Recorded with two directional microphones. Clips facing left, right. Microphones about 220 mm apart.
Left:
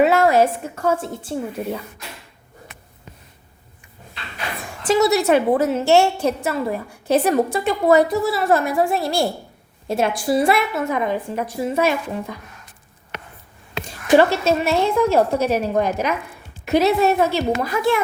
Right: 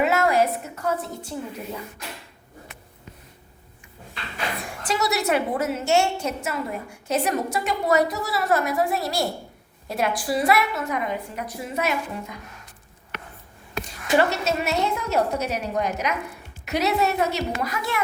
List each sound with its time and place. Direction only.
0.0 s a sound: 30° left (ahead or behind)
1.0 s a woman's voice: 30° left (ahead or behind)
1.6 s speech: 45° left (ahead or behind)
5.0 s a woman's voice: 30° left (ahead or behind)
13.8 s a woman's voice: 30° left (ahead or behind)